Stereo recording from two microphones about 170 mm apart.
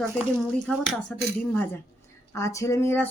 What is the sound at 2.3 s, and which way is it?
Speech, 15° left (ahead or behind).